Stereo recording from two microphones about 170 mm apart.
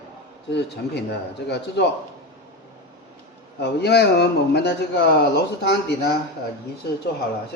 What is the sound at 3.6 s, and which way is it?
Speech, 75° left (ahead or behind).